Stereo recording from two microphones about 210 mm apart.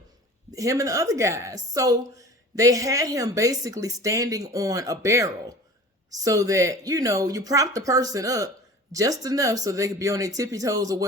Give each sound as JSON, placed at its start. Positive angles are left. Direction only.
{"t": 0.5, "sound": "a woman's voice", "side_deg": -15}